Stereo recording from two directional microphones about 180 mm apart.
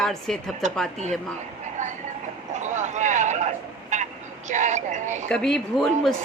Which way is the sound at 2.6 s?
40° right (ahead or behind).